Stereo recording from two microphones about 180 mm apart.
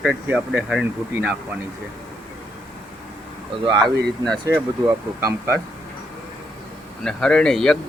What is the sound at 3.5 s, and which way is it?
Speech, 25° right (ahead or behind).